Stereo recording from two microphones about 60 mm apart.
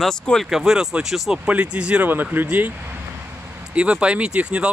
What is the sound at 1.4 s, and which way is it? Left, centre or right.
Speech, right.